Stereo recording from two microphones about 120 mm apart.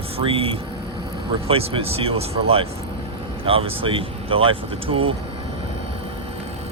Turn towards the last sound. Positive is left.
turn(degrees=-50)  # may be behind; listen again after turning